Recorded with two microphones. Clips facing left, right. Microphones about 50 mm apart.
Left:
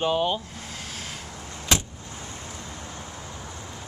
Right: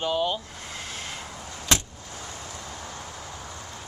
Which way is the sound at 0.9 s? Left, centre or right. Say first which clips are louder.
Right 1 dB; centre.